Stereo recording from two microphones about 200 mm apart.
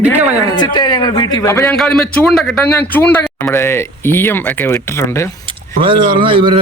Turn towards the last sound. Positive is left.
turn(degrees=-25)  # may be behind; listen again after turning